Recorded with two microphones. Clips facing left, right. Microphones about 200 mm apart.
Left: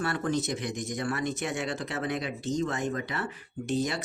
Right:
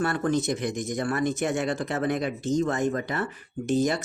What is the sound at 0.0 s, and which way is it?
Speech, 50° right (ahead or behind).